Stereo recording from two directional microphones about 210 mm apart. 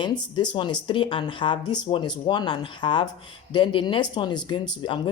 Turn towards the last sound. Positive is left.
turn(degrees=20)  # may be behind; listen again after turning